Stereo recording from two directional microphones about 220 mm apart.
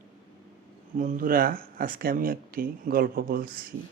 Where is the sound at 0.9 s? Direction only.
40° right (ahead or behind).